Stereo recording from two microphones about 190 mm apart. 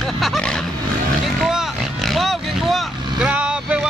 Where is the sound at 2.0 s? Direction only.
Centre (ahead or behind).